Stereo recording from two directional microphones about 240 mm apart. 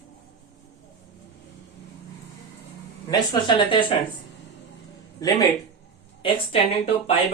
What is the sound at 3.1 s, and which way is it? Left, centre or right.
Speech, centre.